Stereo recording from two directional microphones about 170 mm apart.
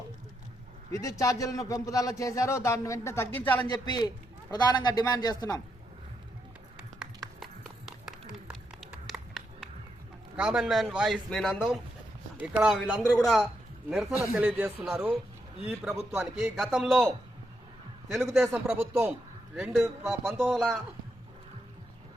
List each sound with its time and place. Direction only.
0.9 s speech: 20° left (ahead or behind)
3.7 s speech: 25° left (ahead or behind)
7.0 s a sound: centre (ahead or behind)
8.4 s music: 5° right (ahead or behind)
10.3 s a man's voice: 5° right (ahead or behind)
14.3 s a man's voice: 10° right (ahead or behind)
18.1 s a man's voice: centre (ahead or behind)